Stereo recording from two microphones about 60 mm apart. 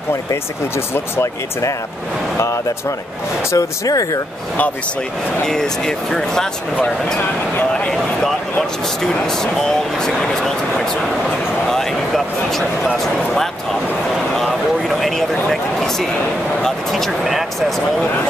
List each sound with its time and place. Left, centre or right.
0.9 s speech: left
3.5 s speech: left
5.4 s speech: centre
9.0 s speech: centre
11.7 s speech: centre
14.9 s a man's voice: centre